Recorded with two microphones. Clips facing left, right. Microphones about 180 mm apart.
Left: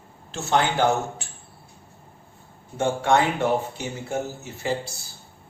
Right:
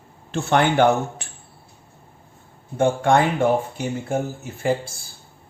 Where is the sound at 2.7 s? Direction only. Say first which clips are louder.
Right 3 dB; 55° right (ahead or behind).